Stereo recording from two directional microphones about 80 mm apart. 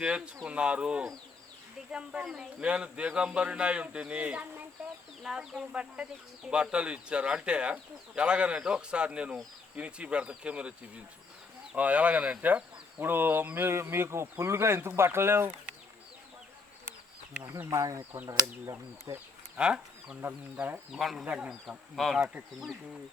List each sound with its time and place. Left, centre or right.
0.4 s speech: centre; by 15.4 s right
17.7 s speech: right
18.3 s speech: right
19.1 s speech: right
19.5 s speech: centre
21.9 s speech: centre